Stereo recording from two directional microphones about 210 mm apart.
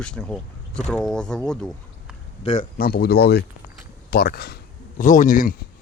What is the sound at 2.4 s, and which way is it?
Speech, 35° left (ahead or behind).